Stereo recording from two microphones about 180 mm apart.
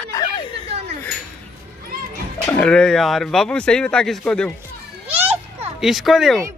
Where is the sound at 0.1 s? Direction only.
25° left (ahead or behind).